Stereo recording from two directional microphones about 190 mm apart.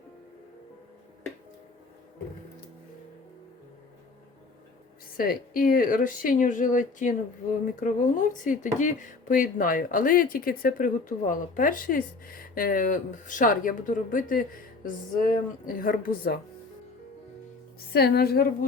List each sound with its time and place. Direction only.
5.1 s speech: 50° left (ahead or behind)
17.9 s a woman's voice: 55° left (ahead or behind)